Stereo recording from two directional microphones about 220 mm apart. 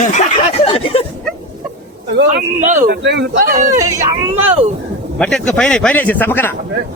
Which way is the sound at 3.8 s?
15° right (ahead or behind).